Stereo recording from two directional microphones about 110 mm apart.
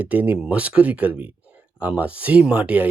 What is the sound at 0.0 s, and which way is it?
Speech, 15° right (ahead or behind).